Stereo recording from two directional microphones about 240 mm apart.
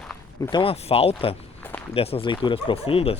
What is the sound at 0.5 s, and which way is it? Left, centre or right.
Speech, left.